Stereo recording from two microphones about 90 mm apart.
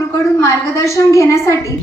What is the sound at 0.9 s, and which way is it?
Speech, 35° left (ahead or behind).